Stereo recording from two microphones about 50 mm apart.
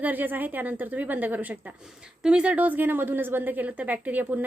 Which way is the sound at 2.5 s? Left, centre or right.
Right.